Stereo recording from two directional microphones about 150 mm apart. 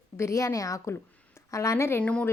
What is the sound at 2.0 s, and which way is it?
Speech, 5° left (ahead or behind).